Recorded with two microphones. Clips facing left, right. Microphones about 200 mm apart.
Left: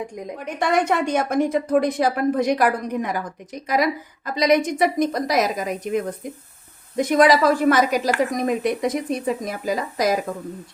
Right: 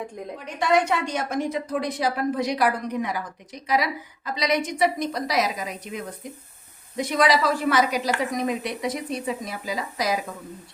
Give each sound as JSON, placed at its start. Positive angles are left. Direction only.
{"t": 0.3, "sound": "a woman's voice", "side_deg": 55}